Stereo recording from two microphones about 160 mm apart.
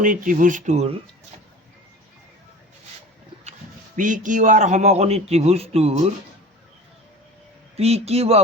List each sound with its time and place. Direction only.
0.0 s a man's voice: 55° right (ahead or behind)
3.9 s a man's voice: 55° right (ahead or behind)
7.8 s a man's voice: 40° right (ahead or behind)